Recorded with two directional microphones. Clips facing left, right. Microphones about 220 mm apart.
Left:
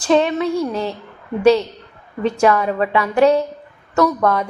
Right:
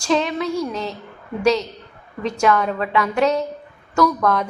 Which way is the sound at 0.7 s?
30° left (ahead or behind).